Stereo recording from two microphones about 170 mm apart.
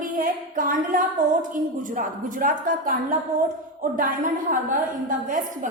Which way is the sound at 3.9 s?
55° right (ahead or behind).